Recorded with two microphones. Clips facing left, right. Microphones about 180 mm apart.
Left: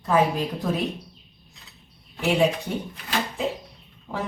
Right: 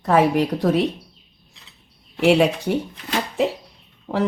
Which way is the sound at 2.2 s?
75° right (ahead or behind).